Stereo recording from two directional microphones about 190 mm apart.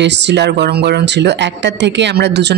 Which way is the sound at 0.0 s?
65° right (ahead or behind).